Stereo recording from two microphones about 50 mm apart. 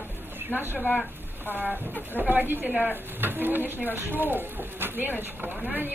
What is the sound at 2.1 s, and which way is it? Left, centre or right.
Speech, right.